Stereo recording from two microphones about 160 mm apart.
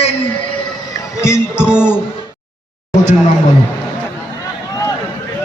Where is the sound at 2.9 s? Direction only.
45° left (ahead or behind).